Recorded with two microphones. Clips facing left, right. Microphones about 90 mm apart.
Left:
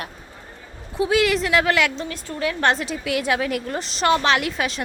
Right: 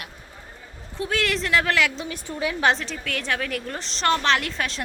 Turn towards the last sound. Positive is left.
turn(degrees=5)  # may be behind; listen again after turning